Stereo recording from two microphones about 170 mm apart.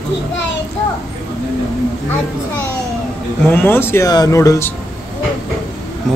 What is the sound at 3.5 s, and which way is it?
Speech, 15° left (ahead or behind).